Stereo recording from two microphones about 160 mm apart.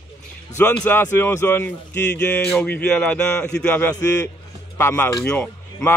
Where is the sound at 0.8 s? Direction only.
15° left (ahead or behind).